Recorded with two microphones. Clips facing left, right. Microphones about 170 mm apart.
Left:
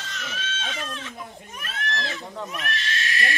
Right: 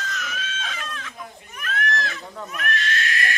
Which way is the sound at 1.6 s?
30° left (ahead or behind).